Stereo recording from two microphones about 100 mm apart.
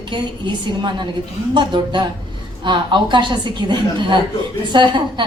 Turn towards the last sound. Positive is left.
turn(degrees=-50)  # may be behind; listen again after turning